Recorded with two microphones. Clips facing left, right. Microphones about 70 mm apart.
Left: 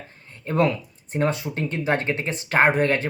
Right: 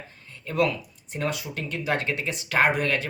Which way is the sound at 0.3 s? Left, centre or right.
Left.